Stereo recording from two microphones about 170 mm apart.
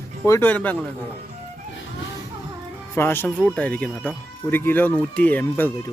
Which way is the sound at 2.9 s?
15° left (ahead or behind).